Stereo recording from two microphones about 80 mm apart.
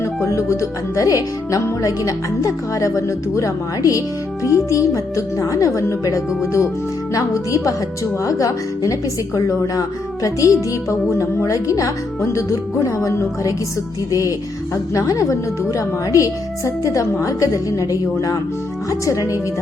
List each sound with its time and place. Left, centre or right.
0.3 s a woman's voice: left
18.9 s speech: left